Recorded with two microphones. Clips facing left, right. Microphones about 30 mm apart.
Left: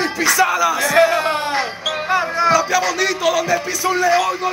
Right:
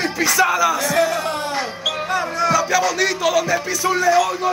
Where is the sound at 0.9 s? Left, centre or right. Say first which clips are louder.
Left 4 dB; left.